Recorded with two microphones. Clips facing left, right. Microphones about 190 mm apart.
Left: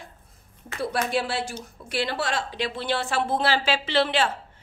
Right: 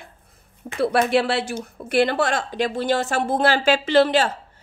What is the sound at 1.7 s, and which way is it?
A woman's voice, 55° right (ahead or behind).